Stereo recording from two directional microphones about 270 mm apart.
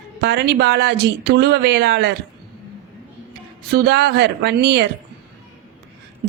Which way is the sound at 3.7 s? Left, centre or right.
Right.